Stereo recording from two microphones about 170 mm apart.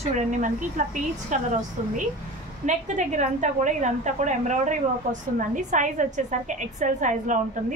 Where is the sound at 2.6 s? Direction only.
45° right (ahead or behind).